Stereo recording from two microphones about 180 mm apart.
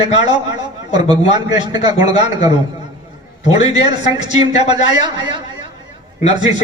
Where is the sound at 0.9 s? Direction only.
25° right (ahead or behind).